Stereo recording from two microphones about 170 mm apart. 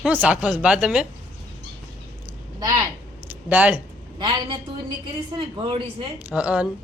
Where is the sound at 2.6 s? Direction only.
20° right (ahead or behind).